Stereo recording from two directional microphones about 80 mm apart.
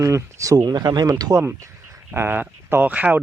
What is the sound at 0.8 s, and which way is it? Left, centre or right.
Speech, right.